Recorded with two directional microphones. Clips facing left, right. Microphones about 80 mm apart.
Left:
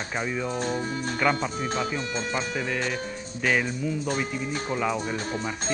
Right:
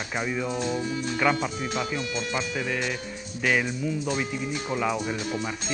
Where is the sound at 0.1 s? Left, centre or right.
Centre.